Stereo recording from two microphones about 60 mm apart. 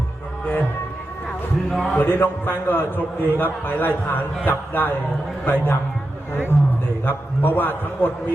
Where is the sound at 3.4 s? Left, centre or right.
Left.